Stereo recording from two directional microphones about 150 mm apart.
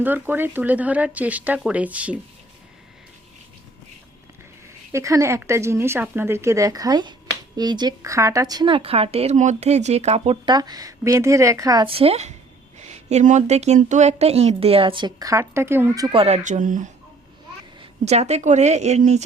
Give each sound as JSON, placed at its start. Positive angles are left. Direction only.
{"t": 0.0, "sound": "speech", "side_deg": -15}
{"t": 4.9, "sound": "speech", "side_deg": -20}
{"t": 10.4, "sound": "speech", "side_deg": -30}
{"t": 11.9, "sound": "a woman's voice", "side_deg": -40}
{"t": 16.0, "sound": "speech", "side_deg": -40}
{"t": 18.0, "sound": "speech", "side_deg": -45}